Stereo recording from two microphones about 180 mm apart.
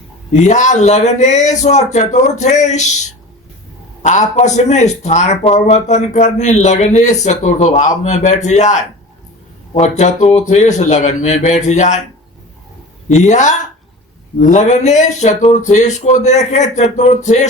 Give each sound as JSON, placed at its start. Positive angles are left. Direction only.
{"t": 0.3, "sound": "speech", "side_deg": 40}
{"t": 13.1, "sound": "speech", "side_deg": 40}